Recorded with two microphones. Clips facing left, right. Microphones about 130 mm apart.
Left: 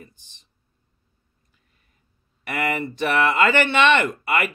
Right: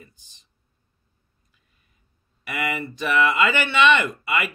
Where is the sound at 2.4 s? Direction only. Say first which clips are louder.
Left 3 dB; 55° left (ahead or behind).